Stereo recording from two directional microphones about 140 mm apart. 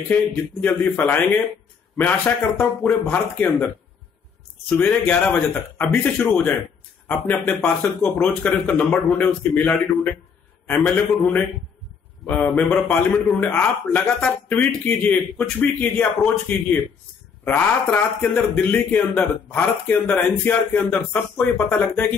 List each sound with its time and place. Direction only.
0.1 s a man's voice: 10° left (ahead or behind)